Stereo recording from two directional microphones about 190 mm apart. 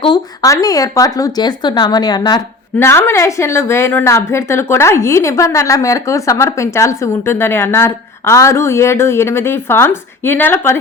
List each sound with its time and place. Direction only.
0.0 s a woman's voice: 20° left (ahead or behind)